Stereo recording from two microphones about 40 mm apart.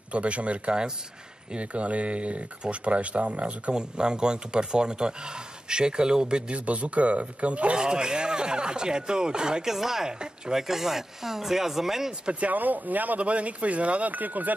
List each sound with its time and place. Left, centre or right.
0.1 s speech: right
3.7 s speech: right
6.5 s speech: right
7.8 s speech: right
10.0 s speech: centre
10.7 s speech: centre
12.3 s speech: right
12.5 s speech: right